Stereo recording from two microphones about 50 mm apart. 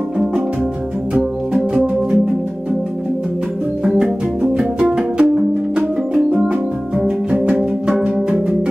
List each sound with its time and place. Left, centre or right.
4.0 s music: centre
5.1 s music: right